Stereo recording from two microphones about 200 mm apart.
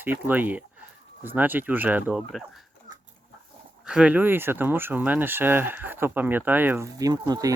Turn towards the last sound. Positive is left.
turn(degrees=-20)  # may be behind; listen again after turning